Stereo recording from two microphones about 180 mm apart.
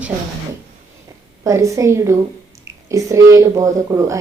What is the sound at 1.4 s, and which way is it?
Speech, 15° right (ahead or behind).